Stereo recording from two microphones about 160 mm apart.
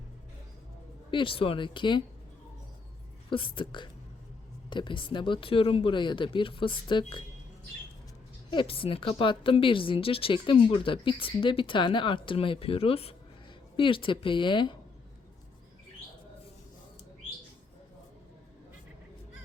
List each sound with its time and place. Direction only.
1.1 s a woman's voice: 35° left (ahead or behind)
3.2 s a woman's voice: 30° left (ahead or behind)
8.4 s a woman's voice: 35° left (ahead or behind)